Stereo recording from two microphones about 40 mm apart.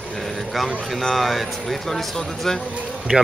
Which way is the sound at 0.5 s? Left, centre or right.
Centre.